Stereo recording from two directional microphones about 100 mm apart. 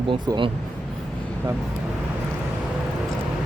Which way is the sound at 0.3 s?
55° right (ahead or behind).